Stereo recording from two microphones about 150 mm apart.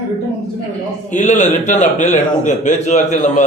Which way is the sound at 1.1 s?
55° left (ahead or behind).